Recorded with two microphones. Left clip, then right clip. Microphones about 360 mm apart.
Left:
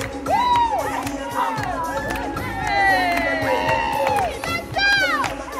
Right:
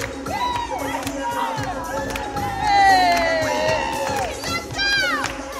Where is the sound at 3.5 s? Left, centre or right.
Centre.